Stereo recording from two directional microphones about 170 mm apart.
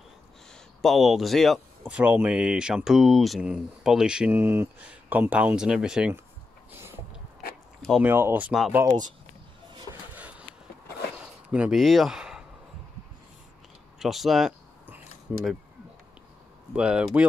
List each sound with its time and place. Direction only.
0.8 s speech: centre (ahead or behind)
8.0 s speech: 10° right (ahead or behind)
8.8 s speech: 25° right (ahead or behind)
11.1 s a sound: 5° right (ahead or behind)
13.9 s a sound: centre (ahead or behind)
15.3 s speech: 5° right (ahead or behind)
16.7 s speech: 5° right (ahead or behind)